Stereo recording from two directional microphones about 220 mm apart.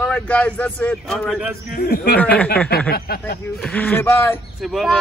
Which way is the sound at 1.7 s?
45° left (ahead or behind).